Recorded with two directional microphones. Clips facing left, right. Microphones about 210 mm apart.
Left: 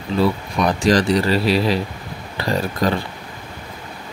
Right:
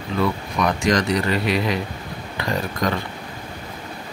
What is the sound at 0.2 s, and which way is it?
Speech, 35° left (ahead or behind).